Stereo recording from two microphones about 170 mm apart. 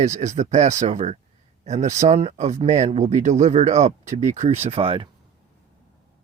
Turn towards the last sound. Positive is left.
turn(degrees=-30)  # may be behind; listen again after turning